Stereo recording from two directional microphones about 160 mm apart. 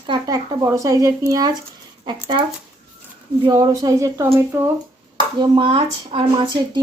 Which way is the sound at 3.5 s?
25° right (ahead or behind).